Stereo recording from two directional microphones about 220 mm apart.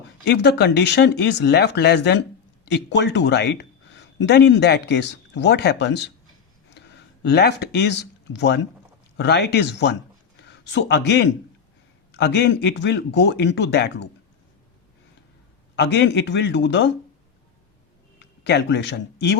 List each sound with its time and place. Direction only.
0.3 s speech: 50° left (ahead or behind)
7.3 s speech: 50° left (ahead or behind)
15.7 s speech: 50° left (ahead or behind)
18.2 s speech: 50° left (ahead or behind)